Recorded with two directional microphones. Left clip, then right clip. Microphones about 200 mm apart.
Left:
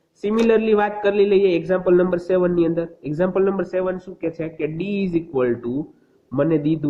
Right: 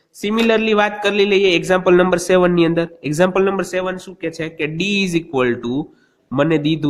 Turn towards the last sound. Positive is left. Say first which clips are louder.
# right 3 dB
turn(degrees=-45)  # may be behind; listen again after turning